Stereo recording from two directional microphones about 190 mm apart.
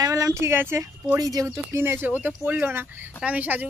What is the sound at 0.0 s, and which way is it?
Speech, 15° right (ahead or behind).